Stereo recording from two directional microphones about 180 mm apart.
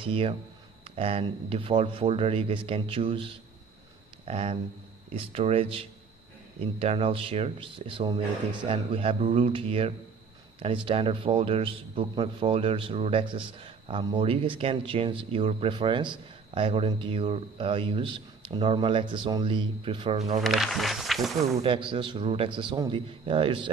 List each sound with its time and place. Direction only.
0.0 s a man's voice: 30° right (ahead or behind)
20.4 s speech: centre (ahead or behind)
21.5 s a man's voice: 30° right (ahead or behind)